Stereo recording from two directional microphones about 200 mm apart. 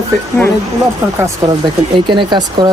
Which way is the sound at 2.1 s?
20° right (ahead or behind).